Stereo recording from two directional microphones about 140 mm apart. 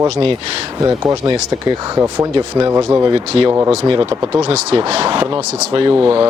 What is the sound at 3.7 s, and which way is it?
Speech, 40° right (ahead or behind).